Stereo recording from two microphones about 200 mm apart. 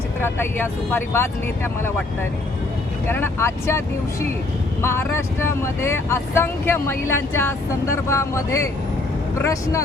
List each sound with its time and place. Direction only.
0.2 s speech: 10° left (ahead or behind)
3.1 s speech: 10° left (ahead or behind)